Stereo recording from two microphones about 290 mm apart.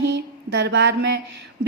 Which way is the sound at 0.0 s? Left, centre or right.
Right.